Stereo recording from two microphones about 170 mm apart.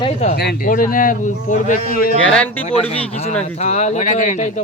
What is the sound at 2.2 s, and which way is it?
Speech, 5° left (ahead or behind).